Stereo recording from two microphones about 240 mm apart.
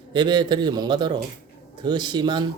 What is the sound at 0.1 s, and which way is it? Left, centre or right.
A man's voice, centre.